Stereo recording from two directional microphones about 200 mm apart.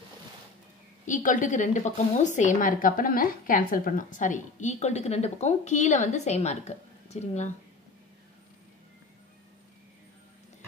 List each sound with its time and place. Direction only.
1.0 s a woman's voice: 40° left (ahead or behind)